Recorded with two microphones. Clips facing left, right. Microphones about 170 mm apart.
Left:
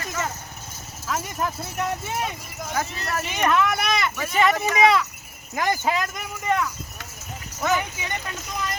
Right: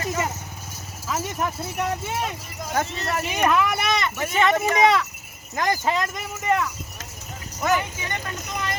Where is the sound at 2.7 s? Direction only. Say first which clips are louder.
Right 2 dB; 25° right (ahead or behind).